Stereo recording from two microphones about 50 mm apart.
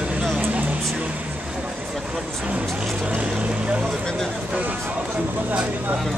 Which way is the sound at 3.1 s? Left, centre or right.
Right.